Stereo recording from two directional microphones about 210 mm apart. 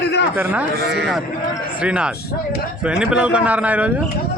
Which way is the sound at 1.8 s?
5° right (ahead or behind).